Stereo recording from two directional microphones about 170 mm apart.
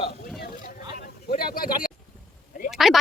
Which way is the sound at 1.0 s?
65° left (ahead or behind).